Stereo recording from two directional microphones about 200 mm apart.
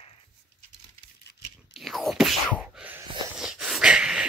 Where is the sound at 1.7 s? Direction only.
Centre (ahead or behind).